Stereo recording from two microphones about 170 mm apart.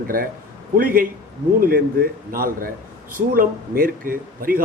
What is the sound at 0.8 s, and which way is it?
A man's voice, 55° right (ahead or behind).